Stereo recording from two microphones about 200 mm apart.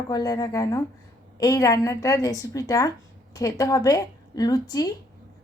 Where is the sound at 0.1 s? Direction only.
20° left (ahead or behind).